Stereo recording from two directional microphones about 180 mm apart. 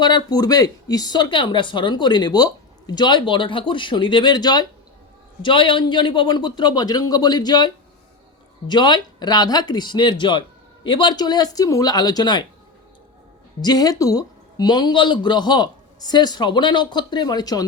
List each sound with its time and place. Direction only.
0.0 s speech: 25° left (ahead or behind)
13.6 s speech: 20° left (ahead or behind)